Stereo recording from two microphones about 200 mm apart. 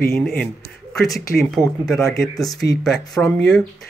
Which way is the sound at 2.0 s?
15° left (ahead or behind).